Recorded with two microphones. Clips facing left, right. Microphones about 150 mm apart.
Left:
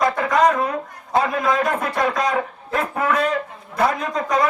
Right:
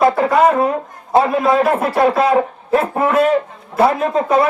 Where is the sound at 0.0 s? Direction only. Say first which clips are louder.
Right 5 dB; 30° right (ahead or behind).